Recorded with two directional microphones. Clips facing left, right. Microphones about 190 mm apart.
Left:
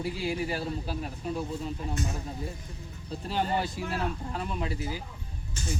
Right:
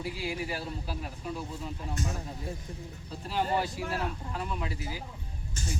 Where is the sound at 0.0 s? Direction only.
30° left (ahead or behind).